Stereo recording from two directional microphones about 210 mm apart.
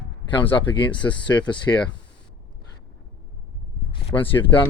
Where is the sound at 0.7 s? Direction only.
20° left (ahead or behind).